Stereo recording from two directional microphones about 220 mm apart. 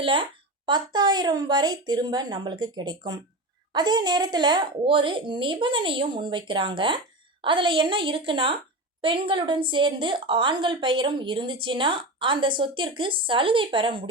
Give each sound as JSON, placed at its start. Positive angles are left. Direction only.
{"t": 0.0, "sound": "a woman's voice", "side_deg": -25}